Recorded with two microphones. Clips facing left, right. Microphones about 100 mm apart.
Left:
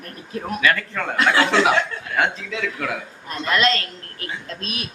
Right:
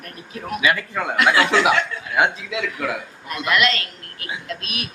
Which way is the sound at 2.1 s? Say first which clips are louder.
Right 3 dB; 10° right (ahead or behind).